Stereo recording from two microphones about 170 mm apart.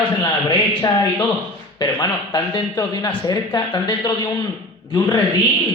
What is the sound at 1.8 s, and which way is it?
A man's voice, 25° left (ahead or behind).